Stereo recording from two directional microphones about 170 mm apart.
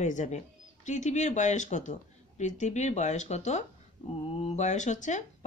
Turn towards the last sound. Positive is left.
turn(degrees=45)  # may be behind; listen again after turning